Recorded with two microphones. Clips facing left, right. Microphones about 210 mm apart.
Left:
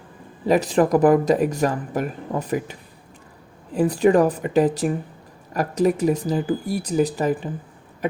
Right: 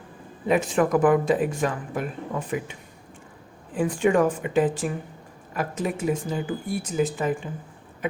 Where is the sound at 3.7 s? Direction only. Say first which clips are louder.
Left 4 dB; 35° left (ahead or behind).